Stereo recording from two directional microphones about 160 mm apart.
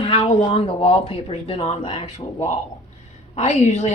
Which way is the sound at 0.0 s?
30° left (ahead or behind).